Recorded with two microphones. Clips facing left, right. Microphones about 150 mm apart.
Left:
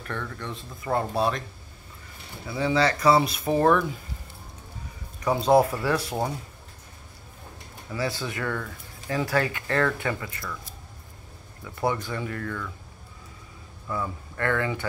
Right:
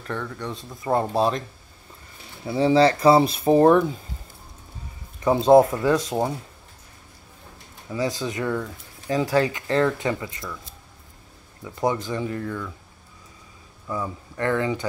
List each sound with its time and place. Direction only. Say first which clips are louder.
0.1 s speech: right 4 dB; 15° right (ahead or behind)
2.4 s speech: right 6 dB; 30° right (ahead or behind)
5.2 s speech: right 5 dB; 25° right (ahead or behind)
7.9 s speech: right 4 dB; 20° right (ahead or behind)
11.6 s speech: right 3 dB; 20° right (ahead or behind)
13.8 s speech: right 2 dB; 15° right (ahead or behind)